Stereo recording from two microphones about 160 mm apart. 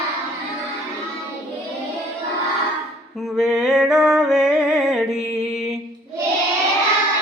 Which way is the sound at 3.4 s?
5° right (ahead or behind).